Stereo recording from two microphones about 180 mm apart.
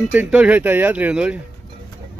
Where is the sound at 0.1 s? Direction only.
5° right (ahead or behind).